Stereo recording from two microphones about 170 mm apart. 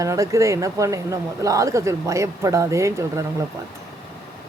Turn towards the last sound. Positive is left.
turn(degrees=-15)  # may be behind; listen again after turning